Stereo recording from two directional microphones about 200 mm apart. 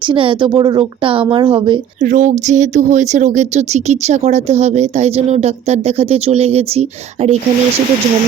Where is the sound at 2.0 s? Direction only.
40° right (ahead or behind).